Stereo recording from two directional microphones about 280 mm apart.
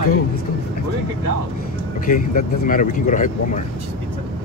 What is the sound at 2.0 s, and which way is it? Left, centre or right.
Speech, left.